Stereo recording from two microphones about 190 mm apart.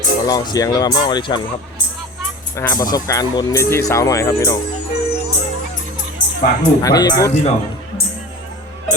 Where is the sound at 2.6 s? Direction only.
15° left (ahead or behind).